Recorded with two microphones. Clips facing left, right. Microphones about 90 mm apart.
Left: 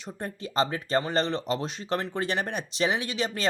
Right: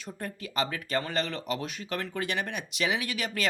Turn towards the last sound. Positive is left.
turn(degrees=30)  # may be behind; listen again after turning